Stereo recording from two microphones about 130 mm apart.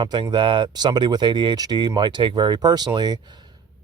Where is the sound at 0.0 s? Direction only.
35° right (ahead or behind).